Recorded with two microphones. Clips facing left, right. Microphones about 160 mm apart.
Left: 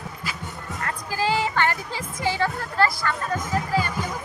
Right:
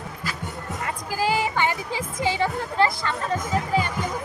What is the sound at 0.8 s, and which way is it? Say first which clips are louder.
Music: even; 10° right (ahead or behind).